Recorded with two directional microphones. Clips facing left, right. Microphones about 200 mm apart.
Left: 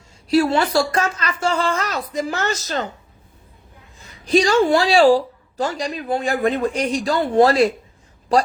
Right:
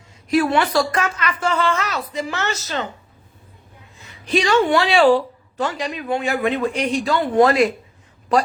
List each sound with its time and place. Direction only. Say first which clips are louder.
0.3 s a woman's voice: left 1 dB; 25° left (ahead or behind); by 2.8 s 45° left (ahead or behind)
4.0 s speech: left 3 dB; 40° left (ahead or behind)